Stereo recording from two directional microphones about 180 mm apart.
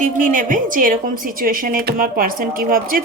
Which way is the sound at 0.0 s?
45° right (ahead or behind).